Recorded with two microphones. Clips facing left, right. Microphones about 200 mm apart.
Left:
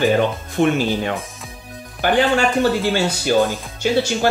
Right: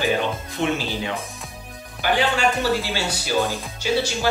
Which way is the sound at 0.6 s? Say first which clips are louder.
Left 8 dB; 55° left (ahead or behind).